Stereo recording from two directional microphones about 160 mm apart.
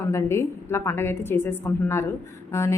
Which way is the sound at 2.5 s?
20° left (ahead or behind).